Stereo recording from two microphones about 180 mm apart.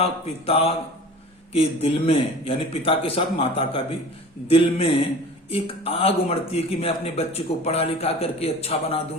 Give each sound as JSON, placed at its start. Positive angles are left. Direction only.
{"t": 0.0, "sound": "a man's voice", "side_deg": 35}